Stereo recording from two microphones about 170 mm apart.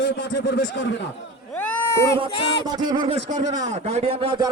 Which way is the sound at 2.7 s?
25° right (ahead or behind).